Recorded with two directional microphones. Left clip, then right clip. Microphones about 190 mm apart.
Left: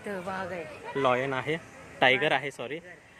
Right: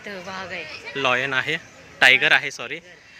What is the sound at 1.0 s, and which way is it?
A man's voice, 10° left (ahead or behind).